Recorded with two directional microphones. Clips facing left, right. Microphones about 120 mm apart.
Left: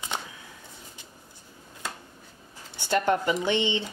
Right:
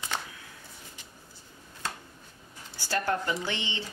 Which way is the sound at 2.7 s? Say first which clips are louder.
Left 5 dB; 20° left (ahead or behind).